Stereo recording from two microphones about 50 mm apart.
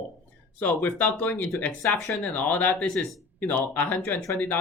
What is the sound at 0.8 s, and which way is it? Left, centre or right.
Speech, left.